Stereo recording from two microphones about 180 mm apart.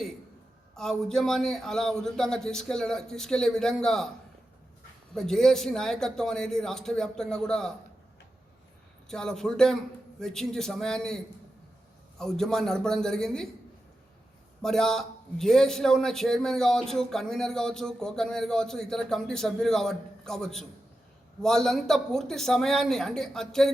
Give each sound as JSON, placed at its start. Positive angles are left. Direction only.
{"t": 0.8, "sound": "a man's voice", "side_deg": 5}
{"t": 5.1, "sound": "a man's voice", "side_deg": 0}
{"t": 9.0, "sound": "a man's voice", "side_deg": 5}
{"t": 12.2, "sound": "a man's voice", "side_deg": 5}
{"t": 14.6, "sound": "a man's voice", "side_deg": 5}